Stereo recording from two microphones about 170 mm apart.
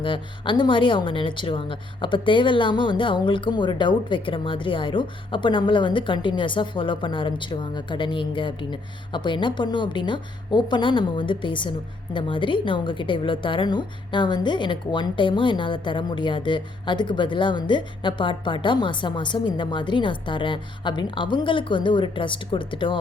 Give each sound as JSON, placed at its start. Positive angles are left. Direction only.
{"t": 0.0, "sound": "a woman's voice", "side_deg": 30}